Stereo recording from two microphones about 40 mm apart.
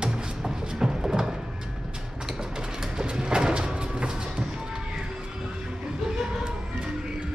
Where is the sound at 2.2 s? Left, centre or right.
Centre.